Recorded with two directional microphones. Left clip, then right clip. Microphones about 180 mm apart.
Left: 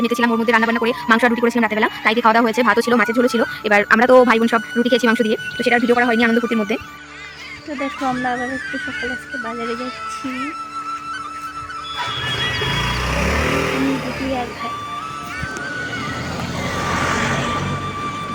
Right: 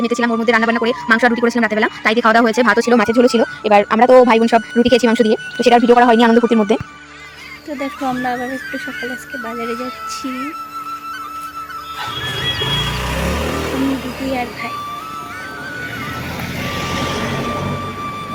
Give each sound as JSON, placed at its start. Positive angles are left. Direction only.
{"t": 0.0, "sound": "speech", "side_deg": -10}
{"t": 5.8, "sound": "speech", "side_deg": 0}
{"t": 6.1, "sound": "speech", "side_deg": -20}
{"t": 7.8, "sound": "speech", "side_deg": 0}